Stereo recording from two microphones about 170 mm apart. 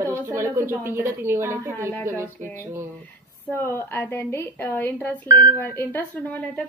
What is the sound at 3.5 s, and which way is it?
A woman's voice, 10° left (ahead or behind).